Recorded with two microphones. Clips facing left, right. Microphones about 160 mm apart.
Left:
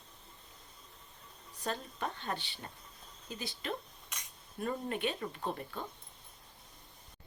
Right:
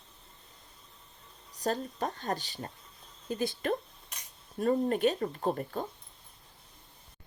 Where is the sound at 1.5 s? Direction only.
40° right (ahead or behind).